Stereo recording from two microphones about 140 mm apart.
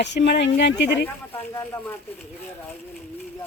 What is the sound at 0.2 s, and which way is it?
Speech, 90° left.